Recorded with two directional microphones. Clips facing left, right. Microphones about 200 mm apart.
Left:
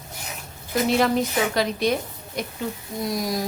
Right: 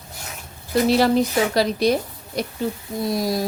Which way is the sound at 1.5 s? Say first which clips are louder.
Right 4 dB; 35° right (ahead or behind).